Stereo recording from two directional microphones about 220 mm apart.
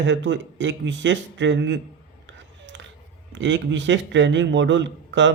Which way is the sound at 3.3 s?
55° right (ahead or behind).